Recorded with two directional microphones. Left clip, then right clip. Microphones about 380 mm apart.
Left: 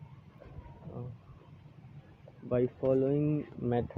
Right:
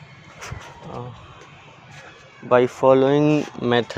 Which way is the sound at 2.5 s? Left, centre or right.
Centre.